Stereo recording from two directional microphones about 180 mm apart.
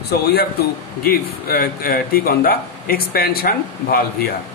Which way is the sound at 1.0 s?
55° left (ahead or behind).